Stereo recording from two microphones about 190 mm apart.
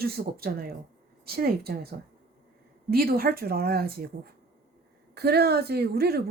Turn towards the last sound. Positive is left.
turn(degrees=-55)  # may be behind; listen again after turning